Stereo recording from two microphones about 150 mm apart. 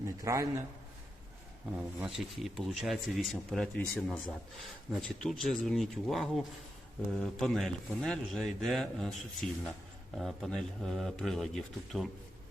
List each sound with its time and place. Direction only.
0.0 s a man's voice: 20° right (ahead or behind)
2.0 s speech: centre (ahead or behind)